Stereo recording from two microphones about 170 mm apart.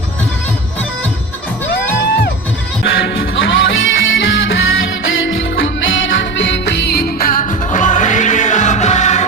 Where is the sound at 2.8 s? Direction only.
85° left.